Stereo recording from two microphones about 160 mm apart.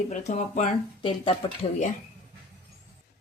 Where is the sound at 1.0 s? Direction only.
35° left (ahead or behind).